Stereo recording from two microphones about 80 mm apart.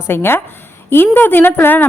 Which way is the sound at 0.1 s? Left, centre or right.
Left.